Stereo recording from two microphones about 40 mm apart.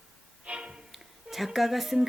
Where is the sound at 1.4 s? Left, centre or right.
Centre.